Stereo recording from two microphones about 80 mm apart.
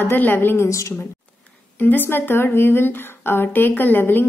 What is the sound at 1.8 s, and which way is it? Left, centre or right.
A woman's voice, left.